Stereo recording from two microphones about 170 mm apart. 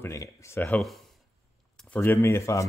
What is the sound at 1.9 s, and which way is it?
Speech, 10° left (ahead or behind).